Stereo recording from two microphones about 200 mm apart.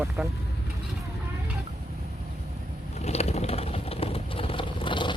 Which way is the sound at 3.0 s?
30° left (ahead or behind).